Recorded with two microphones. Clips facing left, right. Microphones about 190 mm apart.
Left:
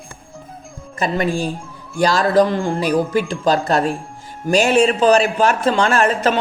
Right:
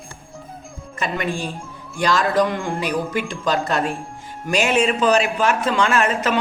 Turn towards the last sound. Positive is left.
turn(degrees=35)  # may be behind; listen again after turning